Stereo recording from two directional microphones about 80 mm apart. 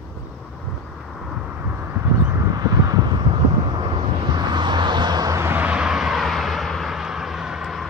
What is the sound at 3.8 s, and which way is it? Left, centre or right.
Vehicle, right.